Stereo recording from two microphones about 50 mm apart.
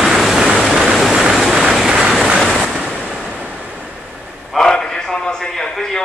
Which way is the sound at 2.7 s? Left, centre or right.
Centre.